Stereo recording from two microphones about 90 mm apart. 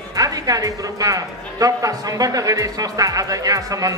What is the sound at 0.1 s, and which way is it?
A woman's voice, 40° right (ahead or behind).